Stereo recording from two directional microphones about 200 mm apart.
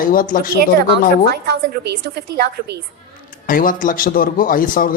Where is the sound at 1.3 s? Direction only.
50° right (ahead or behind).